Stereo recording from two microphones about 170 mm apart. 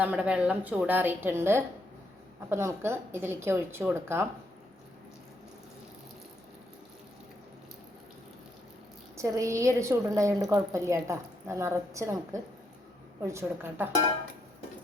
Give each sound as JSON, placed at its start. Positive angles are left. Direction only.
{"t": 0.0, "sound": "a woman's voice", "side_deg": -5}
{"t": 9.1, "sound": "a woman's voice", "side_deg": -20}